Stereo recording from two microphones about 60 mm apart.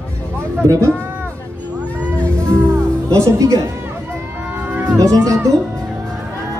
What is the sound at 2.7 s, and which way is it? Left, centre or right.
Music, right.